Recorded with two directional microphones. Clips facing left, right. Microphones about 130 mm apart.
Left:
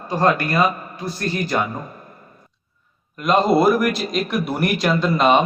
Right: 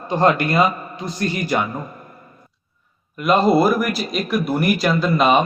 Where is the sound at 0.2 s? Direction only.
20° right (ahead or behind).